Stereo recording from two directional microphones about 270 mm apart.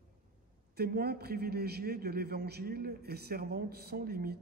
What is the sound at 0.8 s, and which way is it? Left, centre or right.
A man's voice, right.